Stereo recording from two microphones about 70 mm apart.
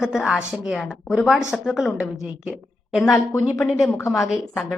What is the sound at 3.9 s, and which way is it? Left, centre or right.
Speech, left.